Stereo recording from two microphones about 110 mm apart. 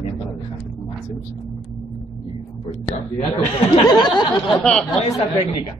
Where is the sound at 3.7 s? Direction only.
45° left (ahead or behind).